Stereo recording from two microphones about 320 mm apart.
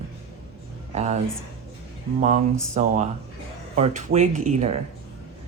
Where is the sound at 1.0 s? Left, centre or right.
Right.